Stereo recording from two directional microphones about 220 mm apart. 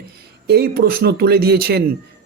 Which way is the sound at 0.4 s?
45° right (ahead or behind).